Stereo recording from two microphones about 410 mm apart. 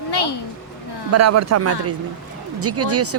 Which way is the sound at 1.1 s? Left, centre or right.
Right.